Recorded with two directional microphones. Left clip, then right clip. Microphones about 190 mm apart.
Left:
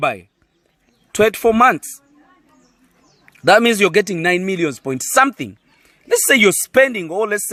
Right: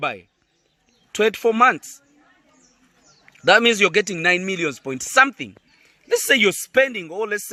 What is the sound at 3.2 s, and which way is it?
A man's voice, 45° left (ahead or behind).